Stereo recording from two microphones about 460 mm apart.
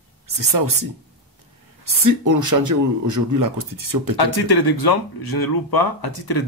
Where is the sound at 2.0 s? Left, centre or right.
Right.